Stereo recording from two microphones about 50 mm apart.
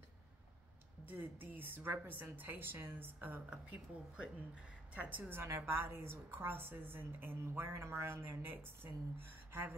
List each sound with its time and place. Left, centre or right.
1.0 s a woman's voice: right
3.4 s speech: right
5.3 s a woman's voice: right
7.7 s speech: right
8.2 s a woman's voice: right